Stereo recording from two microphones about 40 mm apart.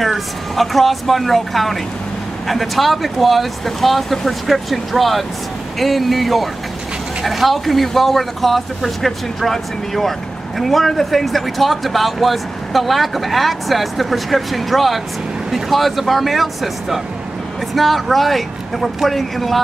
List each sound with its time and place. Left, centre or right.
0.0 s speech: centre